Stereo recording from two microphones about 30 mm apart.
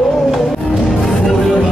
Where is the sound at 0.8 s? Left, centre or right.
Centre.